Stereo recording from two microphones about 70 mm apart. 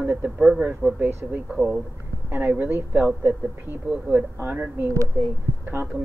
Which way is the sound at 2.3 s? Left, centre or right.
Right.